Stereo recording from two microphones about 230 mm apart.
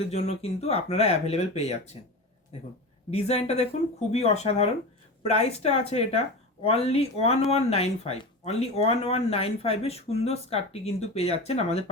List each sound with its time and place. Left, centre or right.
0.1 s speech: left
3.1 s speech: left